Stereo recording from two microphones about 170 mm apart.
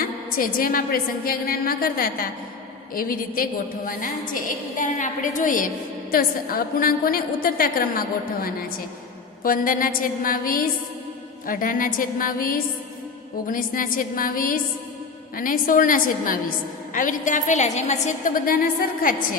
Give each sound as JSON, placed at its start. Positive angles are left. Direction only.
{"t": 0.0, "sound": "a woman's voice", "side_deg": 55}